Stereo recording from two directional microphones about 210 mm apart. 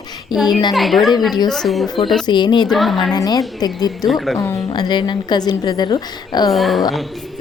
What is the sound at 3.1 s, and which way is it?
Speech, 20° left (ahead or behind).